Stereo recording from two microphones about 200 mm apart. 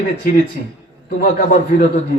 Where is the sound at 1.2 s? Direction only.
45° left (ahead or behind).